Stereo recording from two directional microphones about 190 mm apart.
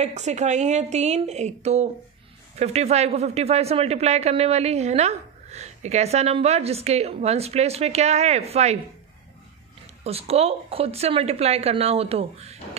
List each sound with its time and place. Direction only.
0.0 s speech: 35° right (ahead or behind)
10.0 s speech: 30° right (ahead or behind)